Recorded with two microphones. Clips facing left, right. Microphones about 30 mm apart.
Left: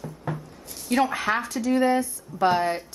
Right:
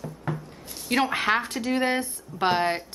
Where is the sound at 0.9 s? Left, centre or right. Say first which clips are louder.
Even; right.